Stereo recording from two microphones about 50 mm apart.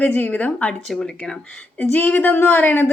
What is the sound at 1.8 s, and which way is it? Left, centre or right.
Speech, left.